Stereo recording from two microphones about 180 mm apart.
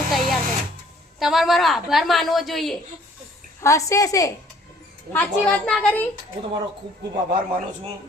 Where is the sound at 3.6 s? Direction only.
15° left (ahead or behind).